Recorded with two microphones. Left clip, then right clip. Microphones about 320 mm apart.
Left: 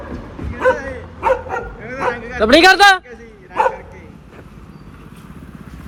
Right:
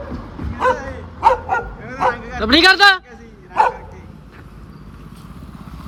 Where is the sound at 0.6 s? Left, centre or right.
Centre.